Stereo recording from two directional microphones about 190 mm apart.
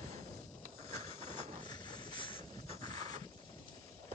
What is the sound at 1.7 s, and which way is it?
Train, 25° left (ahead or behind).